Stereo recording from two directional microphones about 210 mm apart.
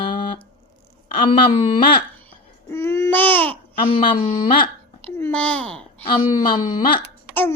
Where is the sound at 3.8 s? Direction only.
25° left (ahead or behind).